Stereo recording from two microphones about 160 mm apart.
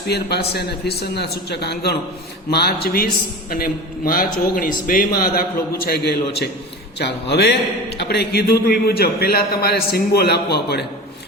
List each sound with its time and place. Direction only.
0.1 s a man's voice: 90° left; by 5.4 s 65° left (ahead or behind)
5.8 s a man's voice: 80° left